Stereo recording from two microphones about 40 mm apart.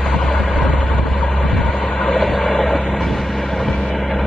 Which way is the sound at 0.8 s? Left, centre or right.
Centre.